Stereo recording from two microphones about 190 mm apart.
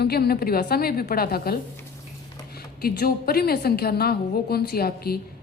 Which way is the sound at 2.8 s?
55° left (ahead or behind).